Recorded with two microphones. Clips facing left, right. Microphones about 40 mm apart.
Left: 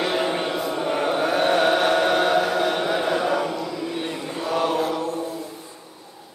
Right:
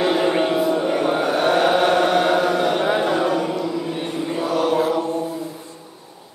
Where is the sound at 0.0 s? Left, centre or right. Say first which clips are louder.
Right 5 dB; centre.